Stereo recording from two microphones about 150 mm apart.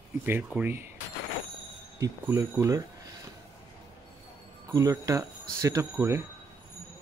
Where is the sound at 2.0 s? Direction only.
20° right (ahead or behind).